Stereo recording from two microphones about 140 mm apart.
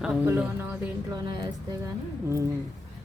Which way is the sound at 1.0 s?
30° right (ahead or behind).